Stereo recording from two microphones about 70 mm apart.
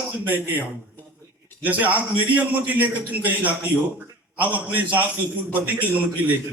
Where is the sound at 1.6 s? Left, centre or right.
Right.